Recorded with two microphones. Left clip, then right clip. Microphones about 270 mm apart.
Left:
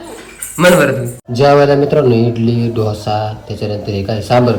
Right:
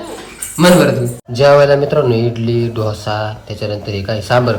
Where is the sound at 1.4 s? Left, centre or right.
Centre.